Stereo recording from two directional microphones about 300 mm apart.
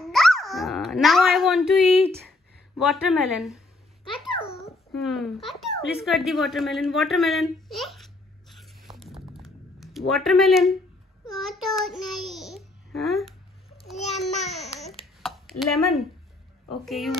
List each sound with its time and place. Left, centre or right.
0.0 s a sound: centre
2.9 s speech: centre
5.0 s a sound: centre
11.4 s child singing: centre
13.9 s babbling: left
14.8 s babbling: centre
15.6 s speech: centre